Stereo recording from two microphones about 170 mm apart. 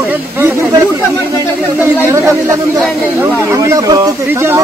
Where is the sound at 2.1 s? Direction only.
15° right (ahead or behind).